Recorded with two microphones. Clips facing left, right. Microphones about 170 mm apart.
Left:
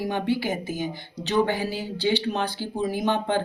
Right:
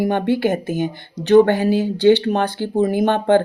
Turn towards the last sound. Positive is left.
turn(degrees=-60)  # may be behind; listen again after turning